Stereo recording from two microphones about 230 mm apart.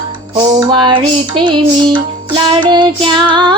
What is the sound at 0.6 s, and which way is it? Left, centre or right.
Music, centre.